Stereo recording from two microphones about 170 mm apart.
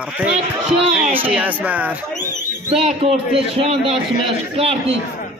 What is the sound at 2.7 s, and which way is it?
A man's voice, 35° right (ahead or behind).